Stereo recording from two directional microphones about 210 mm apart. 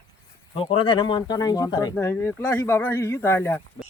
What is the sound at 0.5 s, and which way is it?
Speech, 25° left (ahead or behind).